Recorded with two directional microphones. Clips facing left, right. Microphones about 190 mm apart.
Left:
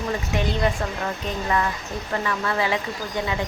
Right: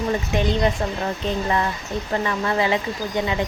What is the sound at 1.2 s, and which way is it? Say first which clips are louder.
Speech: right 2 dB; 25° right (ahead or behind).